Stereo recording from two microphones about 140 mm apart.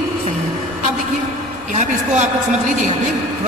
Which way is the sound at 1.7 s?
60° right (ahead or behind).